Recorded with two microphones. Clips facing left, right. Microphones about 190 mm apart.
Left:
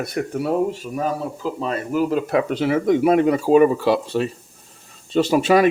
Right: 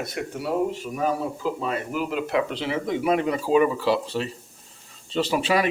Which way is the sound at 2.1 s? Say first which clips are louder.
Left 5 dB; 45° left (ahead or behind).